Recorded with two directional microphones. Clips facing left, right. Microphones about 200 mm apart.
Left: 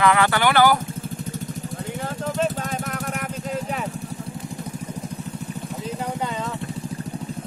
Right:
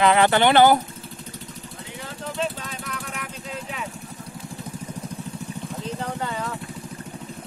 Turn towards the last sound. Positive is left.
turn(degrees=10)  # may be behind; listen again after turning